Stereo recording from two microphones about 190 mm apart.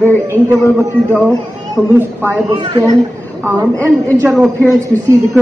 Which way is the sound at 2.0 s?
10° right (ahead or behind).